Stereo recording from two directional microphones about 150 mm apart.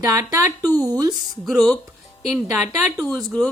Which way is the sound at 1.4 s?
Centre (ahead or behind).